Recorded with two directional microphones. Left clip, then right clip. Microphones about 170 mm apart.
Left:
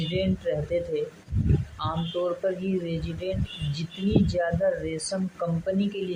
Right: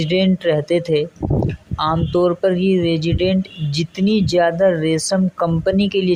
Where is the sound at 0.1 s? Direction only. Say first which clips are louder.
Right 11 dB; 60° right (ahead or behind).